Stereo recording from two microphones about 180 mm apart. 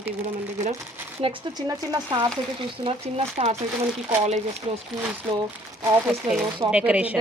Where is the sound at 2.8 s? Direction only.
30° right (ahead or behind).